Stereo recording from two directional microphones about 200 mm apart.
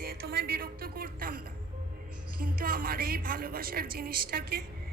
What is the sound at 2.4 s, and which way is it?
A woman's voice, 45° right (ahead or behind).